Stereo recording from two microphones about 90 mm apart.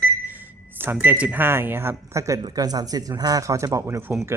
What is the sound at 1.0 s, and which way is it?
Speech, 15° right (ahead or behind).